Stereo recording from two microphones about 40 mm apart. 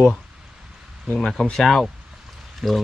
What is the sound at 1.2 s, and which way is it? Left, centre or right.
Speech, left.